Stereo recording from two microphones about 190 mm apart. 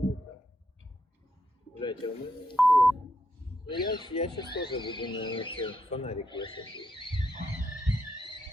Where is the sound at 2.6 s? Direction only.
Centre (ahead or behind).